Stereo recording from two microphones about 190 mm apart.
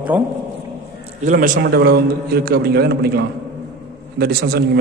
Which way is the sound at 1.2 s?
45° right (ahead or behind).